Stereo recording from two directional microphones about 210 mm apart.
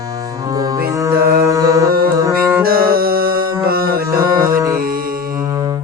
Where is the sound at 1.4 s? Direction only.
15° right (ahead or behind).